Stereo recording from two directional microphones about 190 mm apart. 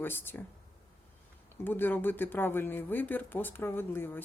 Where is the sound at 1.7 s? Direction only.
10° left (ahead or behind).